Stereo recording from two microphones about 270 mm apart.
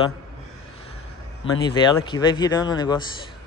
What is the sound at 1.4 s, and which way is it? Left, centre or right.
Speech, centre.